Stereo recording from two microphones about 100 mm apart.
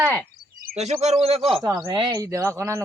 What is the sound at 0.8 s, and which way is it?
Speech, 90° right.